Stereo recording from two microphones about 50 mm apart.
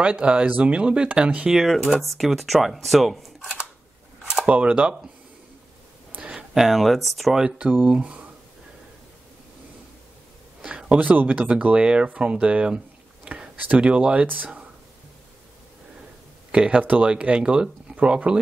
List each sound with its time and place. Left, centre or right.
0.0 s speech: right
1.5 s speech: centre
3.3 s camera: centre
4.5 s speech: right
6.2 s a sound: centre
6.5 s speech: centre
7.3 s speech: centre
10.6 s a sound: right
11.3 s speech: right
14.2 s speech: right
16.5 s speech: centre